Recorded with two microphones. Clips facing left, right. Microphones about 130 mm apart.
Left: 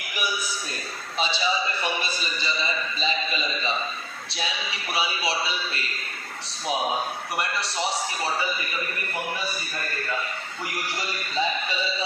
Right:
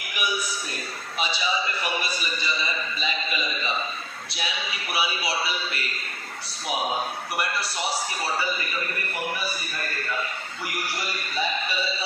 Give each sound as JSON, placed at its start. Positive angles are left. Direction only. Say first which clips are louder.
{"t": 1.8, "sound": "a man's voice", "louder": "even", "side_deg": 25}
{"t": 4.9, "sound": "a man's voice", "louder": "left 1 dB", "side_deg": 25}
{"t": 7.3, "sound": "a man's voice", "louder": "left 1 dB", "side_deg": 25}